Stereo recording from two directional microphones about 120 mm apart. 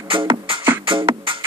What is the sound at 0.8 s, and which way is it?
Music, 45° right (ahead or behind).